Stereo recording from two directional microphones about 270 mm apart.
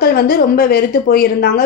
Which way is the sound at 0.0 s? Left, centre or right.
Left.